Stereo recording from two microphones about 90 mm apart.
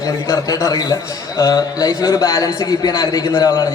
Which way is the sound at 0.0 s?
40° left (ahead or behind).